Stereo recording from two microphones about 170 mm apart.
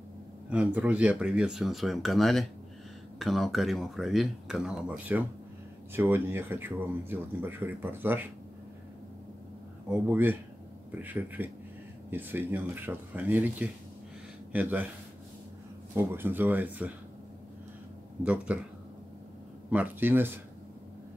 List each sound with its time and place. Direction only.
0.5 s speech: 10° right (ahead or behind)
9.8 s speech: 10° right (ahead or behind)
15.9 s speech: 15° right (ahead or behind)
18.2 s speech: 5° right (ahead or behind)
19.7 s speech: 10° right (ahead or behind)